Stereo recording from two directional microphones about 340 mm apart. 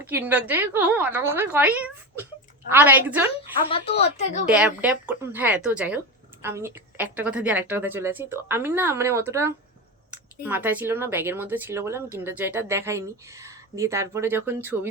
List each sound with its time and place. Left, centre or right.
0.0 s a woman's voice: centre
3.7 s speech: centre
4.4 s a woman's voice: centre